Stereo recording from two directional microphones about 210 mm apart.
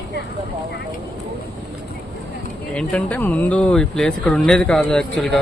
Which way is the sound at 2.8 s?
5° left (ahead or behind).